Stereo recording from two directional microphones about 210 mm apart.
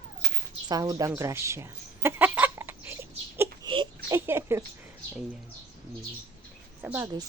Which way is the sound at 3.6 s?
25° right (ahead or behind).